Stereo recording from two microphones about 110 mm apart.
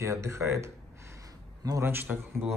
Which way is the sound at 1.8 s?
20° right (ahead or behind).